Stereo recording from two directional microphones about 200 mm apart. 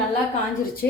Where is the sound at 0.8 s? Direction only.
50° left (ahead or behind).